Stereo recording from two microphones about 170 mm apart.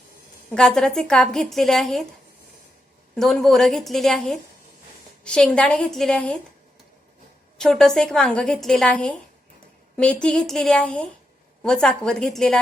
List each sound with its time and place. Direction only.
0.5 s a woman's voice: 5° left (ahead or behind)
3.2 s a woman's voice: centre (ahead or behind)
7.6 s a woman's voice: centre (ahead or behind)